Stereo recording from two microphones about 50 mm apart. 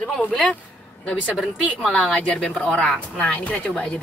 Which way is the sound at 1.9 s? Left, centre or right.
Centre.